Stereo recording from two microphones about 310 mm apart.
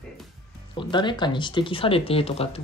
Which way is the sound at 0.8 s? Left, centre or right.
Centre.